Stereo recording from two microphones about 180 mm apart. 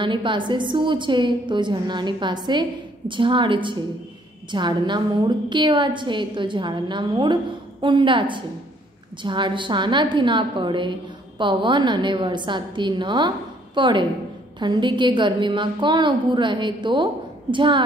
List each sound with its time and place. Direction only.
0.0 s a woman's voice: 25° right (ahead or behind)